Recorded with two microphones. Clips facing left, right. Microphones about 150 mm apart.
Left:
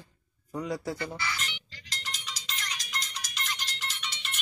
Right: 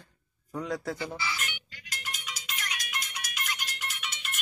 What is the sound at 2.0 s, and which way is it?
Music, centre (ahead or behind).